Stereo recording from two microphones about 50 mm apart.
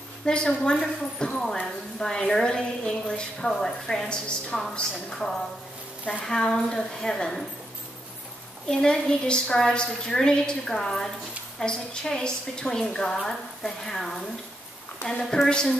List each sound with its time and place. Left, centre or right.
0.2 s a woman's voice: centre
8.6 s a woman's voice: centre